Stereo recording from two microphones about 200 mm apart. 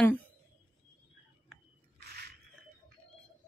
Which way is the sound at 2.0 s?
55° right (ahead or behind).